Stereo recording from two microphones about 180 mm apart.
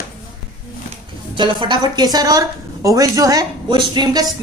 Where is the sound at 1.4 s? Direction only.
25° right (ahead or behind).